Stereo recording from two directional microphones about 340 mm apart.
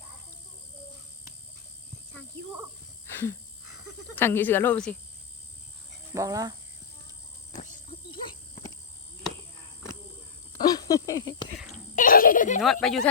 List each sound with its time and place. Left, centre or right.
4.1 s speech: centre
6.1 s speech: centre
7.5 s a sound: left
10.5 s a sound: centre
11.9 s giggle: left
12.6 s speech: centre